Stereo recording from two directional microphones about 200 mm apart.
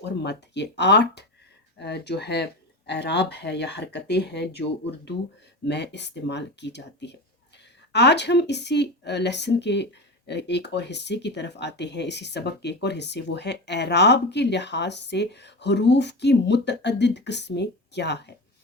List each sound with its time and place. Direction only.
0.0 s speech: 60° left (ahead or behind)